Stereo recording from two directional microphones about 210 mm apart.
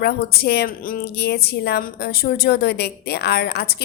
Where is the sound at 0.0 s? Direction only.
50° left (ahead or behind).